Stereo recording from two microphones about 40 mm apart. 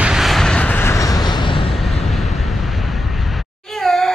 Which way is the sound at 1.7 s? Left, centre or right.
Centre.